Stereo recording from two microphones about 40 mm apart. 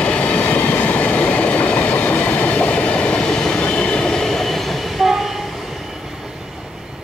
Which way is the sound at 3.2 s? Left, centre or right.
Centre.